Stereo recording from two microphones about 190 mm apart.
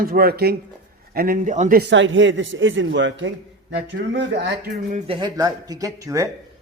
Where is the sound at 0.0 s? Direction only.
50° right (ahead or behind).